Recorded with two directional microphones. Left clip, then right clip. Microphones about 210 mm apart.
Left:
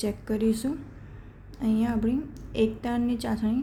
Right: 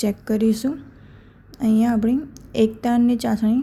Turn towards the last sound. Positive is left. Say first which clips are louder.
# right 8 dB
turn(degrees=-30)  # may be behind; listen again after turning